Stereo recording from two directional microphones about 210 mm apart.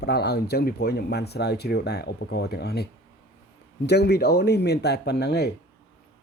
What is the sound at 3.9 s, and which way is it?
Speech, 50° left (ahead or behind).